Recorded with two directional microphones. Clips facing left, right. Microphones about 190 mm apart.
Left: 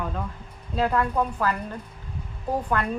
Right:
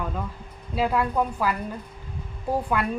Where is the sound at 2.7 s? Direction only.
10° right (ahead or behind).